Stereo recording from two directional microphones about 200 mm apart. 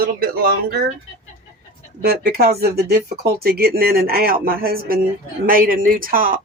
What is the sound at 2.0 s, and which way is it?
Speech, 50° right (ahead or behind).